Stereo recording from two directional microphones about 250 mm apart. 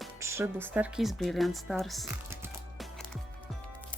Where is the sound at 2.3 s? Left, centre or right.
Centre.